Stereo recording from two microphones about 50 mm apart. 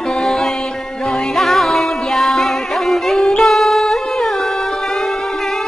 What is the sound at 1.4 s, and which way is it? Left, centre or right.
Music, centre.